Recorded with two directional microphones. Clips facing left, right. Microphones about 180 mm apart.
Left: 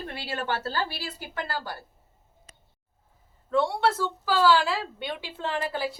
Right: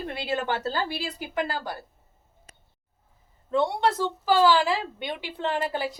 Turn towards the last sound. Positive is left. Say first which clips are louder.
# right 2 dB
turn(degrees=-20)  # may be behind; listen again after turning